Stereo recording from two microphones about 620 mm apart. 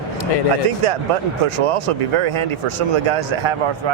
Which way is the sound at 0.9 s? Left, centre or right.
Right.